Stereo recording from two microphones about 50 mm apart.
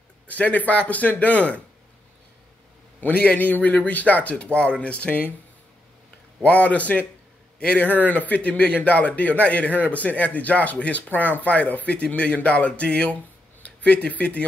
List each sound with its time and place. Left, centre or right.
0.3 s speech: left
3.0 s a man's voice: left
6.4 s speech: left
7.9 s speech: left